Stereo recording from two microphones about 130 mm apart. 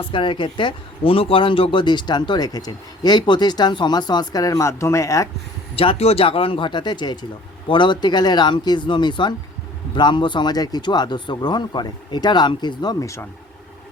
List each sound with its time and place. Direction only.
0.1 s speech: 40° left (ahead or behind)
5.7 s speech: 45° left (ahead or behind); by 13.2 s 25° left (ahead or behind)